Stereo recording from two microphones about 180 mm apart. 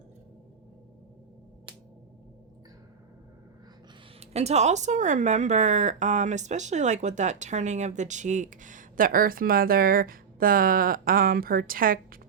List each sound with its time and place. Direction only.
4.2 s speech: 35° right (ahead or behind); by 12.2 s 50° right (ahead or behind)